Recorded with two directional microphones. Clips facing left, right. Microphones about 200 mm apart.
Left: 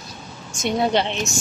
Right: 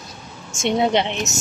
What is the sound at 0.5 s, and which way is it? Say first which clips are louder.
Speech: right 2 dB; 25° right (ahead or behind).